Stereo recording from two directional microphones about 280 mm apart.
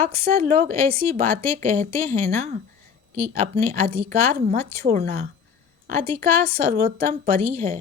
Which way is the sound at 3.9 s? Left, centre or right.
Centre.